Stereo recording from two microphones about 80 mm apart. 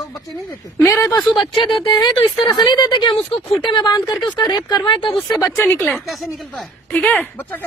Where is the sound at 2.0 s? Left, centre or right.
Left.